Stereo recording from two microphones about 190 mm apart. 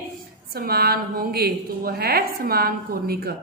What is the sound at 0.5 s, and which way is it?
A woman's voice, 55° right (ahead or behind).